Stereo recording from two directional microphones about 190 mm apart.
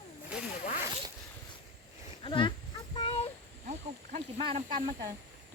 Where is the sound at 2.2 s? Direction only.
25° left (ahead or behind).